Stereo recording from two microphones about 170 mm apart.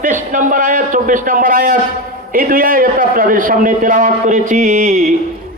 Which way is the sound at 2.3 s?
55° right (ahead or behind).